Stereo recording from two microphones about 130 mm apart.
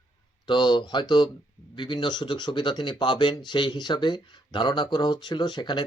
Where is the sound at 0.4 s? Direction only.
35° left (ahead or behind).